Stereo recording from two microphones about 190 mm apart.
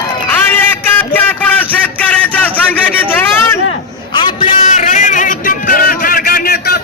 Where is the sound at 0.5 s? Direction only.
10° left (ahead or behind).